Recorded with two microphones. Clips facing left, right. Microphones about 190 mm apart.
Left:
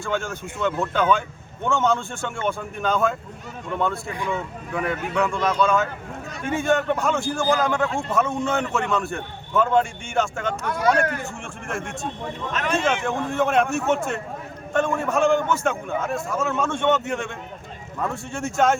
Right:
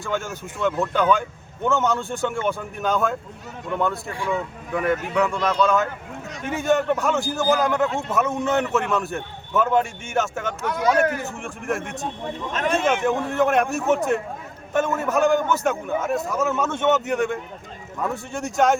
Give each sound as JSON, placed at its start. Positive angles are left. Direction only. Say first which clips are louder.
{"t": 0.0, "sound": "a man's voice", "louder": "left 1 dB", "side_deg": 0}
{"t": 11.0, "sound": "speech", "louder": "right 3 dB", "side_deg": -20}
{"t": 11.4, "sound": "a man's voice", "louder": "right 4 dB", "side_deg": 0}